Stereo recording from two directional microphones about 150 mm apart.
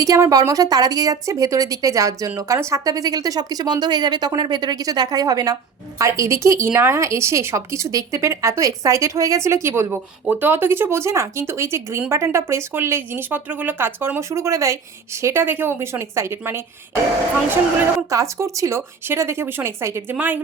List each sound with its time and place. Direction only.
0.0 s a woman's voice: 25° right (ahead or behind)
18.1 s a woman's voice: 20° right (ahead or behind)